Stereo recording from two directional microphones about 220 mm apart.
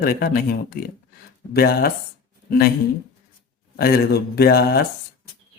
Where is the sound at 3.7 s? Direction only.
45° left (ahead or behind).